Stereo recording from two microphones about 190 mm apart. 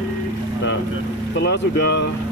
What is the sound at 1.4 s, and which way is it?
Speech, 60° left (ahead or behind).